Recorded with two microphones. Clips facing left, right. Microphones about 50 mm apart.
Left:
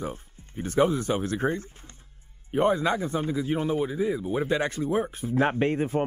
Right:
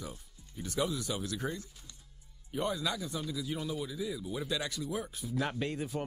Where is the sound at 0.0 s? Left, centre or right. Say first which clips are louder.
Left 11 dB; left.